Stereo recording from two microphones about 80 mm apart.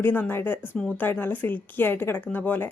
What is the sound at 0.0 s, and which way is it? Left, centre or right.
Speech, left.